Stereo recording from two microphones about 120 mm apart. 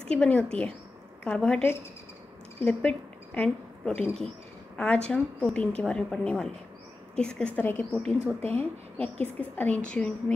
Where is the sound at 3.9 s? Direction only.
20° left (ahead or behind).